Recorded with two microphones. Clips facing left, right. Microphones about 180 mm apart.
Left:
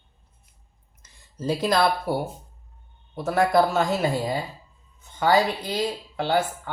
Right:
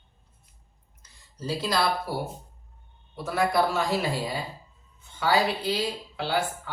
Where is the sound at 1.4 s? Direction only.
50° left (ahead or behind).